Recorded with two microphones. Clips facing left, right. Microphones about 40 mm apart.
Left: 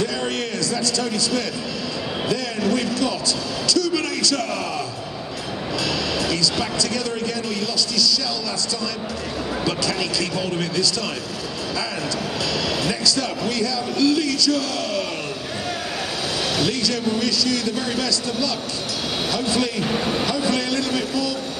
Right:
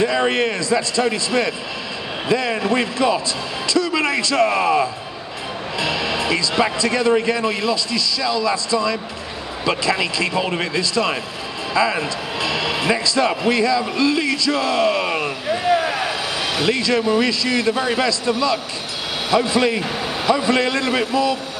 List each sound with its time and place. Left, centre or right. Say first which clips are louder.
0.0 s a man's voice: right 6 dB; right
12.4 s speech: right 4 dB; right
16.5 s speech: right 7 dB; right
19.8 s a man's voice: left 1 dB; centre; by 21.4 s right